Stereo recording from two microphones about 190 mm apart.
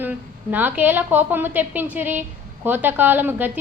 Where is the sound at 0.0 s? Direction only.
10° right (ahead or behind).